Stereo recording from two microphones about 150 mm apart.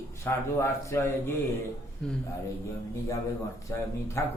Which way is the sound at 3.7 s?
20° left (ahead or behind).